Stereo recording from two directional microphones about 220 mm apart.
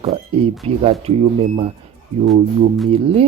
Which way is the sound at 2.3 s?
Centre (ahead or behind).